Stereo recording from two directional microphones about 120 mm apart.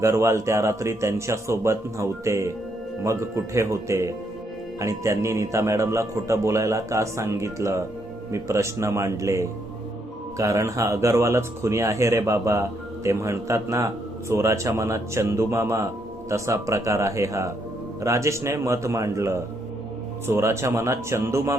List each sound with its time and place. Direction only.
0.0 s speech: 25° right (ahead or behind)